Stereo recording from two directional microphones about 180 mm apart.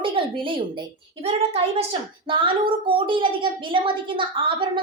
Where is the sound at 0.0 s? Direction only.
30° right (ahead or behind).